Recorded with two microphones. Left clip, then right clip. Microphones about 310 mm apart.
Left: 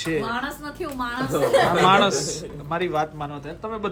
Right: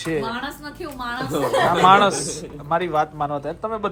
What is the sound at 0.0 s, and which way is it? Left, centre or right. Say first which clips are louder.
A man's voice: even; centre.